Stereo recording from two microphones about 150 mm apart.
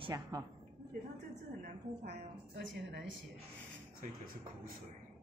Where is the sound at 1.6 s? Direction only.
90° right.